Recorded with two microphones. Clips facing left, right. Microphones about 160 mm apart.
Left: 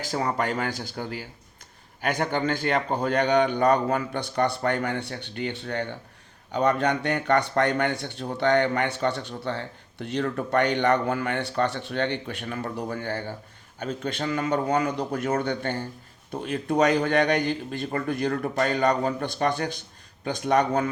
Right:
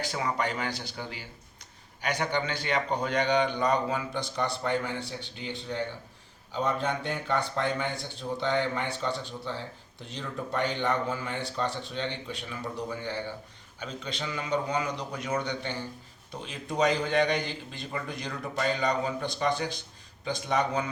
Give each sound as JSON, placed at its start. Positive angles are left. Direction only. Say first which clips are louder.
{"t": 0.0, "sound": "a man's voice", "louder": "left 4 dB", "side_deg": 40}